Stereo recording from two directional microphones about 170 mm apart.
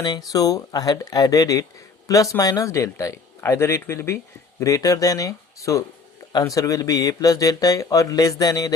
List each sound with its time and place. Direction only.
0.0 s speech: 25° left (ahead or behind)